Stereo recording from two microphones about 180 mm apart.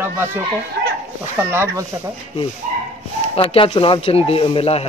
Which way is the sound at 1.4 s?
15° right (ahead or behind).